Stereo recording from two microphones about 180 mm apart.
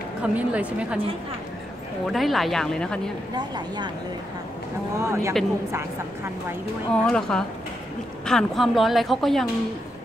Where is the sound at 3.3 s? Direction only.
25° right (ahead or behind).